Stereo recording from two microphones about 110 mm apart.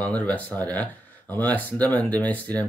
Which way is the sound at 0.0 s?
15° left (ahead or behind).